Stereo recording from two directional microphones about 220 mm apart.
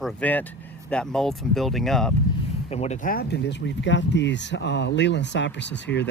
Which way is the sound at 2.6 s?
30° left (ahead or behind).